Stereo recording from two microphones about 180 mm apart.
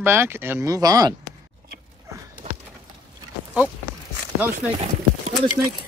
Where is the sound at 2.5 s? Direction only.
35° right (ahead or behind).